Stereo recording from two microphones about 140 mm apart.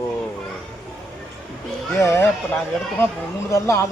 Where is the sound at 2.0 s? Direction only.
20° left (ahead or behind).